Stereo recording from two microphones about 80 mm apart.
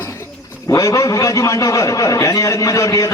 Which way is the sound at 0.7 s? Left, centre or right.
Left.